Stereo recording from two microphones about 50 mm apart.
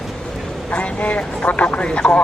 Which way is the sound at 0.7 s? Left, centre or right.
Left.